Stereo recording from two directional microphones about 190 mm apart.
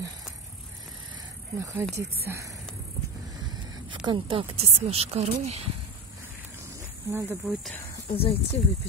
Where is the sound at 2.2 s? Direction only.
15° right (ahead or behind).